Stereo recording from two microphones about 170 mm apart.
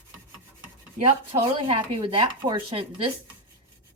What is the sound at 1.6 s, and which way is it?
Speech, 30° right (ahead or behind).